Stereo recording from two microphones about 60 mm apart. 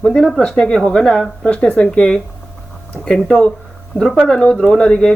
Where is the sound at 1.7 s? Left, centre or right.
Centre.